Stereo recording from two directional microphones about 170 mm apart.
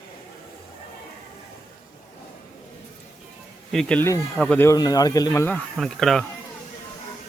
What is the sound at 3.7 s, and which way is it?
Speech, 5° left (ahead or behind).